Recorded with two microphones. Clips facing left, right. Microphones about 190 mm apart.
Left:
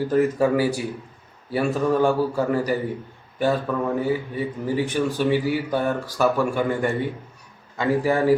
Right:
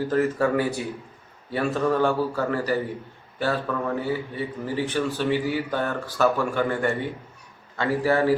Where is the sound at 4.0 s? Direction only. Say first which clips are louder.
Left 4 dB; 15° left (ahead or behind).